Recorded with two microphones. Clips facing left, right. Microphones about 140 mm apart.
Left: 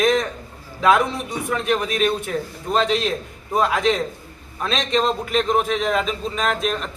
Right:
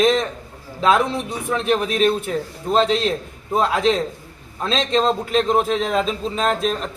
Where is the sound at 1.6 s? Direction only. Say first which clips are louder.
Right 3 dB; 30° right (ahead or behind).